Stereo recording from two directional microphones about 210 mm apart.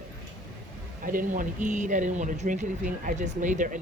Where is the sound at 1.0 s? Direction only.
40° right (ahead or behind).